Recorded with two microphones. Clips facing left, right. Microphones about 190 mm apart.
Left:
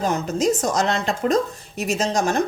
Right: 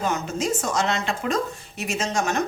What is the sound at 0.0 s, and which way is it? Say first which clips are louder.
Speech: left 5 dB; 35° left (ahead or behind).